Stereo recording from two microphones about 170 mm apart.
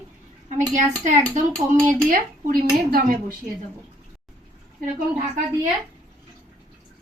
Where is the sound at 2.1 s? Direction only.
60° right (ahead or behind).